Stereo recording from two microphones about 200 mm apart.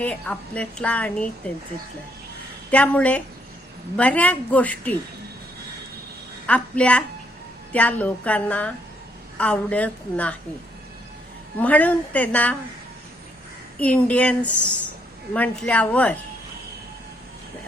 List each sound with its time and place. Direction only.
0.0 s speech: 5° left (ahead or behind)
2.6 s speech: 5° left (ahead or behind)
6.5 s a woman's voice: 5° left (ahead or behind)
11.5 s speech: 10° left (ahead or behind)
13.7 s speech: 5° left (ahead or behind)